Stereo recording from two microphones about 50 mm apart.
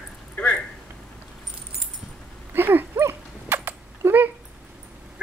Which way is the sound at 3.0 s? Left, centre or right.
Right.